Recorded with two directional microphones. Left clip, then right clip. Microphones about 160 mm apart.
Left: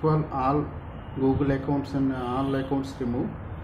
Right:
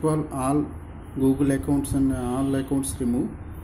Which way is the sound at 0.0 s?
45° right (ahead or behind).